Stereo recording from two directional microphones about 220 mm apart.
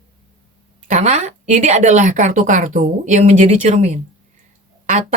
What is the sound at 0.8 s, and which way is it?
Speech, 35° right (ahead or behind).